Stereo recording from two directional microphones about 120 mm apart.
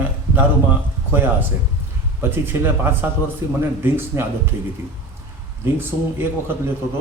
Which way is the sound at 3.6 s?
20° right (ahead or behind).